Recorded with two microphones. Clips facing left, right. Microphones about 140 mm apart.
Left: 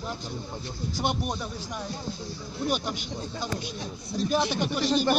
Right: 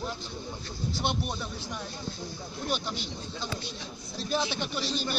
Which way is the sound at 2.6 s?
45° left (ahead or behind).